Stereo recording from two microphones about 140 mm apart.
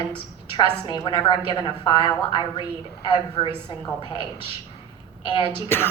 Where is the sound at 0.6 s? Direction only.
35° left (ahead or behind).